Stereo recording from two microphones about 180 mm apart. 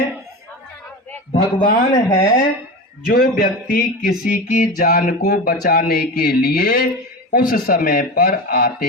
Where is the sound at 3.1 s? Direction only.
55° left (ahead or behind).